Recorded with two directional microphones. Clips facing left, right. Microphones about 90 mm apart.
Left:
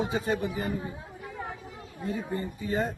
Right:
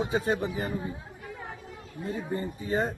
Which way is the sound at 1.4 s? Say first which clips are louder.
Left 7 dB; 5° left (ahead or behind).